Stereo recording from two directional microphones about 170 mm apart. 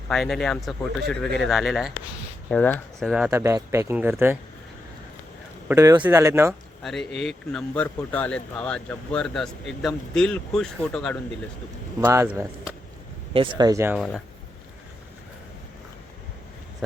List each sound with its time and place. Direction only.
0.1 s speech: centre (ahead or behind)
2.5 s speech: 10° left (ahead or behind)
3.1 s speech: 10° right (ahead or behind)
5.6 s speech: 15° right (ahead or behind)
6.8 s speech: centre (ahead or behind)
11.9 s speech: 15° right (ahead or behind)
13.3 s speech: 30° right (ahead or behind)
13.9 s speech: centre (ahead or behind)